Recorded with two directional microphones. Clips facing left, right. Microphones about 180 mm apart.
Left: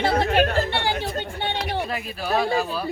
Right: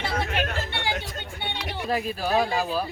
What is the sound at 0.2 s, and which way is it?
Chatter, 35° left (ahead or behind).